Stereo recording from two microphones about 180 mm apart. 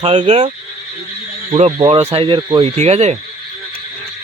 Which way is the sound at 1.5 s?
35° right (ahead or behind).